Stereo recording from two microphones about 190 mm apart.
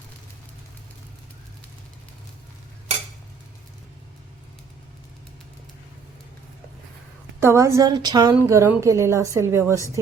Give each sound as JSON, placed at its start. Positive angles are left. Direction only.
{"t": 7.3, "sound": "a woman's voice", "side_deg": -15}